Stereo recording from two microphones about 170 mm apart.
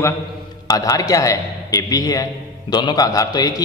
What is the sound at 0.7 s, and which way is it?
A man's voice, 20° left (ahead or behind).